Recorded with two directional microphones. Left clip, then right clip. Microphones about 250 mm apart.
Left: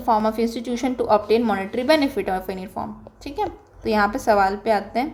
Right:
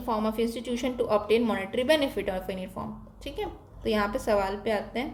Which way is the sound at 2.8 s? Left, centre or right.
Centre.